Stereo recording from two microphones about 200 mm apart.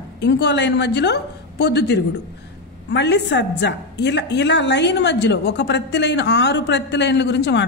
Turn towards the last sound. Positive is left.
turn(degrees=60)  # may be behind; listen again after turning